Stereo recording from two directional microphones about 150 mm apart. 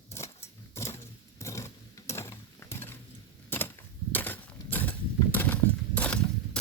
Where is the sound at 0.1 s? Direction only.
20° left (ahead or behind).